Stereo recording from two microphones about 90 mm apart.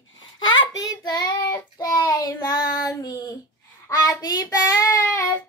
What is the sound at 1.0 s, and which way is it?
Child singing, 50° left (ahead or behind).